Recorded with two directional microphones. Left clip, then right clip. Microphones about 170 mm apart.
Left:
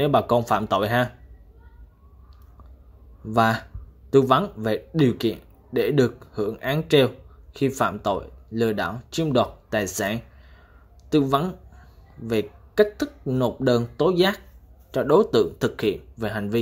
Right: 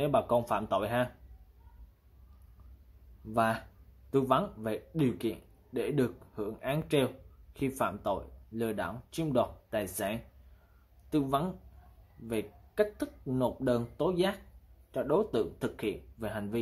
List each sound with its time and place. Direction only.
0.0 s speech: 25° left (ahead or behind)
3.3 s speech: 25° left (ahead or behind)